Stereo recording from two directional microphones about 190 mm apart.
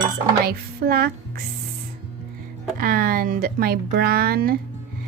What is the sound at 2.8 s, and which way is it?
Speech, 50° right (ahead or behind).